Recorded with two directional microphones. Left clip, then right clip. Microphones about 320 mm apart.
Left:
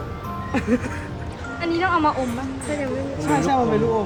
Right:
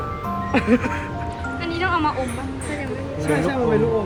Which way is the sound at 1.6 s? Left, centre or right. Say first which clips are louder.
Left 2 dB; left.